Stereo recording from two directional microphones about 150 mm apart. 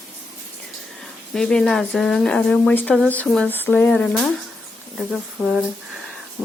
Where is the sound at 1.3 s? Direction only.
5° left (ahead or behind).